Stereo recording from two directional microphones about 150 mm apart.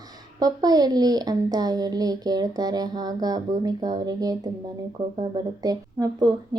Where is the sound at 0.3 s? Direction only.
25° right (ahead or behind).